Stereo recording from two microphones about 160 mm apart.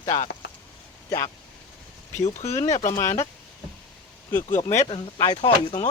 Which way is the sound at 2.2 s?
45° left (ahead or behind).